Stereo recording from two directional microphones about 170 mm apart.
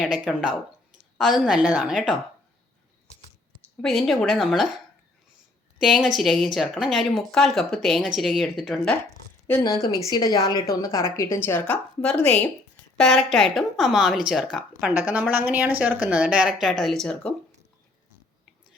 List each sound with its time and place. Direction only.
0.0 s speech: 5° right (ahead or behind)
3.8 s speech: centre (ahead or behind)
5.8 s speech: centre (ahead or behind)
9.6 s a woman's voice: 20° left (ahead or behind); by 17.3 s 5° left (ahead or behind)